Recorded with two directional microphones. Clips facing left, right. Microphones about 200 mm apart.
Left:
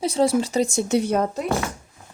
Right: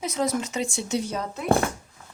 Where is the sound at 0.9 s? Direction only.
60° left (ahead or behind).